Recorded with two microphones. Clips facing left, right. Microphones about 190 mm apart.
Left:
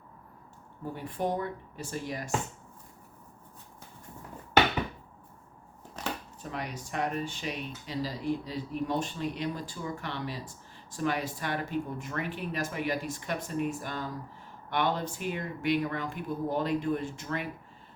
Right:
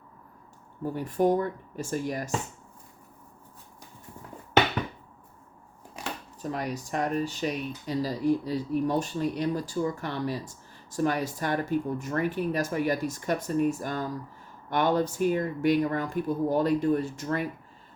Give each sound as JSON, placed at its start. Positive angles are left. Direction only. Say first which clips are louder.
{"t": 0.9, "sound": "speech", "louder": "right 8 dB", "side_deg": -45}
{"t": 6.0, "sound": "a sound", "louder": "left 1 dB", "side_deg": -10}
{"t": 6.4, "sound": "speech", "louder": "right 7 dB", "side_deg": -40}